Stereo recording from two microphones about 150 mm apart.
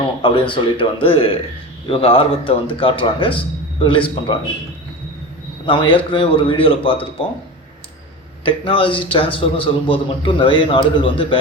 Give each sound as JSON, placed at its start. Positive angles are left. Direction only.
{"t": 0.2, "sound": "a man's voice", "side_deg": 35}
{"t": 5.6, "sound": "a man's voice", "side_deg": 35}
{"t": 8.4, "sound": "a man's voice", "side_deg": 35}